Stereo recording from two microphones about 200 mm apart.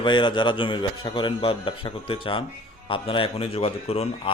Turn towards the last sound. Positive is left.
turn(degrees=30)  # may be behind; listen again after turning